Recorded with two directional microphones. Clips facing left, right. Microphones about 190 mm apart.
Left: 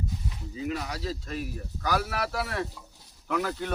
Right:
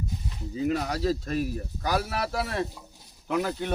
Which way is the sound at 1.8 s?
25° right (ahead or behind).